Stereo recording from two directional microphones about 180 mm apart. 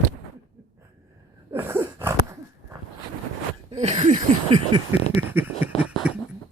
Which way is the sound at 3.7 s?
40° right (ahead or behind).